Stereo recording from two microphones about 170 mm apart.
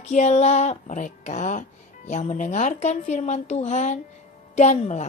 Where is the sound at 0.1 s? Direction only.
40° left (ahead or behind).